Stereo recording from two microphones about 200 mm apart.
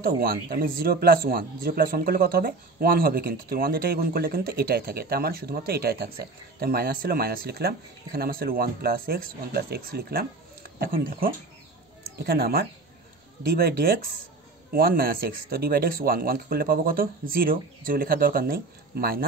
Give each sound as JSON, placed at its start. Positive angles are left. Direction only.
{"t": 0.0, "sound": "speech", "side_deg": -50}